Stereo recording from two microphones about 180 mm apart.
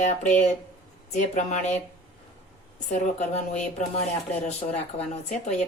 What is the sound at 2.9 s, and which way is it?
Speech, 40° left (ahead or behind).